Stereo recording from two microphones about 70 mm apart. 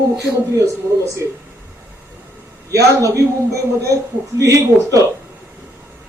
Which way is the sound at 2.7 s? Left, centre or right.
Right.